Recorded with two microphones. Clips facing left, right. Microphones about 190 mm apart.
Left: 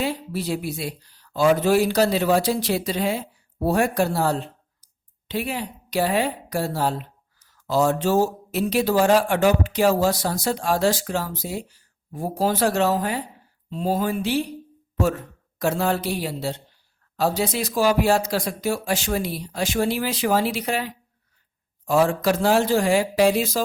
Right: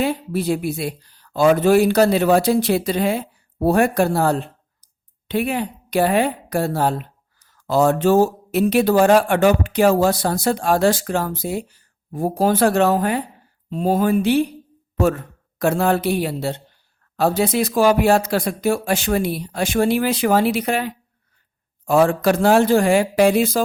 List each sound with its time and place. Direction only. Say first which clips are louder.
0.0 s a woman's voice: right 5 dB; 55° right (ahead or behind)